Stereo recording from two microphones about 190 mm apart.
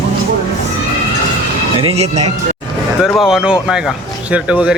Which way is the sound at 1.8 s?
30° right (ahead or behind).